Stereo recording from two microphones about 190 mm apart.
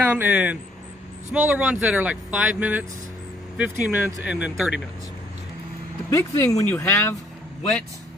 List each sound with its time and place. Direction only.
0.1 s speech: 10° right (ahead or behind)
6.0 s speech: 15° left (ahead or behind)